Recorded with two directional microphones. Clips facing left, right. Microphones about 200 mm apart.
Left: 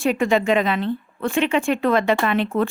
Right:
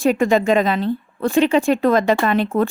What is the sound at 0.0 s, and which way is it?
A woman's voice, 40° right (ahead or behind).